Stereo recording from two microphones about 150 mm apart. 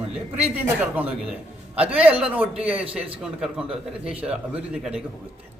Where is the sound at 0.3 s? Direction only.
15° right (ahead or behind).